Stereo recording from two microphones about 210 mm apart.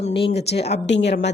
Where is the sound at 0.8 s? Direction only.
55° left (ahead or behind).